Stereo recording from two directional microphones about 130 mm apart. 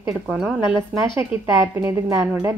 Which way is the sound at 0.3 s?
10° right (ahead or behind).